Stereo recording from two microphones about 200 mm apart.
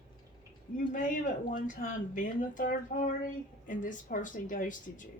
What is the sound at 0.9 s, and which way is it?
Speech, 45° left (ahead or behind).